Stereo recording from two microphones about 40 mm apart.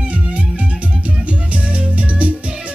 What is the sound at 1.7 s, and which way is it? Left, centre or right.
Music, right.